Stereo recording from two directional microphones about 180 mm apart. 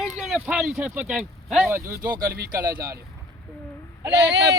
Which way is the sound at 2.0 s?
55° right (ahead or behind).